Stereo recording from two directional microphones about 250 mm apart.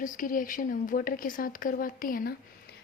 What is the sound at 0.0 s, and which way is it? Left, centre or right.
Speech, left.